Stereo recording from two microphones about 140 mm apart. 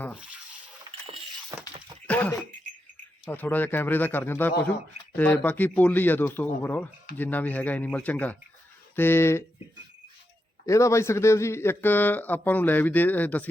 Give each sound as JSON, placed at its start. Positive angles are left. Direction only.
{"t": 0.1, "sound": "drip", "side_deg": -5}
{"t": 1.5, "sound": "speech", "side_deg": -20}
{"t": 2.0, "sound": "speech", "side_deg": 10}
{"t": 10.7, "sound": "speech", "side_deg": 20}